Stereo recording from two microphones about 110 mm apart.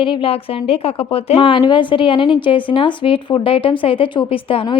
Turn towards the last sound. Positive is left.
turn(degrees=50)  # may be behind; listen again after turning